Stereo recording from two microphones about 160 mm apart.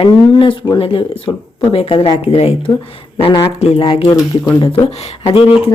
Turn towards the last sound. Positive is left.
turn(degrees=35)  # may be behind; listen again after turning